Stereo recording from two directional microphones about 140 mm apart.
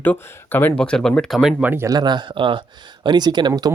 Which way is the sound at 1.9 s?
30° right (ahead or behind).